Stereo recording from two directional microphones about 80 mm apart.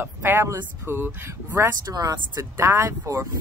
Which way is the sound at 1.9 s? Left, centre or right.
Right.